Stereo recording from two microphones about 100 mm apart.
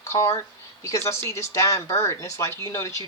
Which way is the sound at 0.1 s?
30° left (ahead or behind).